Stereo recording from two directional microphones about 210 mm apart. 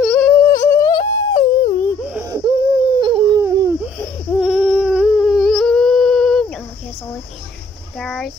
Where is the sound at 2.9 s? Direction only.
20° right (ahead or behind).